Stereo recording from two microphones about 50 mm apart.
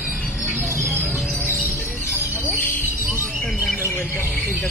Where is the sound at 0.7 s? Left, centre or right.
Right.